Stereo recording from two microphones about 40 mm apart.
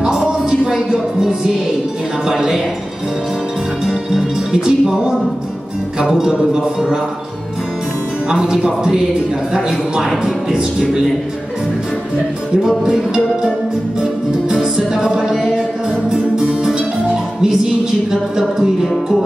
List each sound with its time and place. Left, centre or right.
0.0 s a sound: centre
0.9 s music: centre
2.2 s a man's voice: centre
4.1 s a man's voice: centre
8.3 s a man's voice: centre
14.5 s music: centre
18.6 s a man's voice: centre